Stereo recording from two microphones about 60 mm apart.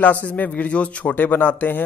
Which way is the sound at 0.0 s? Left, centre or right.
Left.